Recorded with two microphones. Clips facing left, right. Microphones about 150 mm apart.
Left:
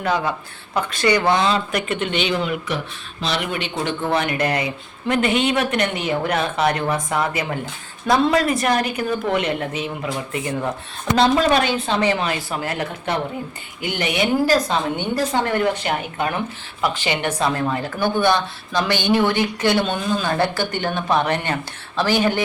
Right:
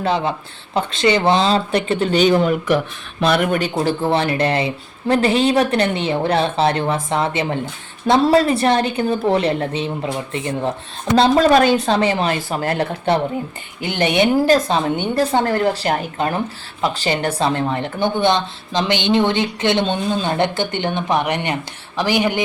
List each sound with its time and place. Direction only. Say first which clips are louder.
0.0 s speech: right 2 dB; 25° right (ahead or behind)
11.2 s speech: right 4 dB; 40° right (ahead or behind); by 22.4 s 15° right (ahead or behind)